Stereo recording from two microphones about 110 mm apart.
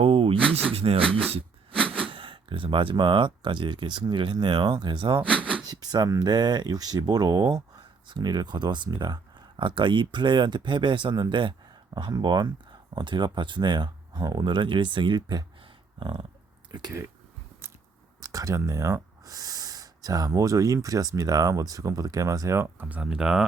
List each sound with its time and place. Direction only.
0.0 s a sound: 60° right (ahead or behind)
0.7 s speech: 65° right (ahead or behind)
1.0 s speech: 10° left (ahead or behind)
2.0 s speech: 50° right (ahead or behind)
5.3 s speech: 10° left (ahead or behind)
5.6 s speech: 35° right (ahead or behind)
17.6 s biting: 20° right (ahead or behind)
18.2 s speech: 30° right (ahead or behind); by 23.5 s 5° right (ahead or behind)